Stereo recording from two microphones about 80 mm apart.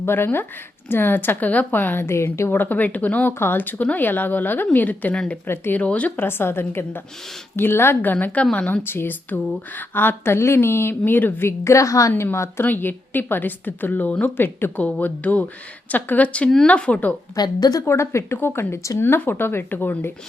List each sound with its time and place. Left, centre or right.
0.0 s a woman's voice: left
2.5 s a woman's voice: left
5.8 s a woman's voice: centre
8.8 s a woman's voice: left
17.3 s a woman's voice: left
17.8 s a woman's voice: left